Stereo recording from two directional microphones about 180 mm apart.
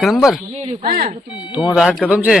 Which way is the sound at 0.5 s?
35° right (ahead or behind).